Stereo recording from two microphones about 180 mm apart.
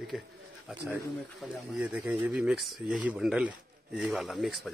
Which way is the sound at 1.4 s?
5° right (ahead or behind).